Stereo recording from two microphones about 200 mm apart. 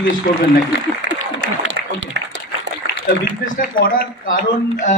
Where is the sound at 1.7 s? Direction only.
65° right (ahead or behind).